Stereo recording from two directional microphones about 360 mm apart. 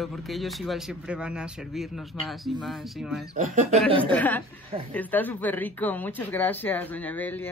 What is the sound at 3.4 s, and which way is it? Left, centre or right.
Speech, centre.